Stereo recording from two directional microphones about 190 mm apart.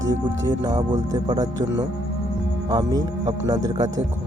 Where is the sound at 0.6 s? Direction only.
20° right (ahead or behind).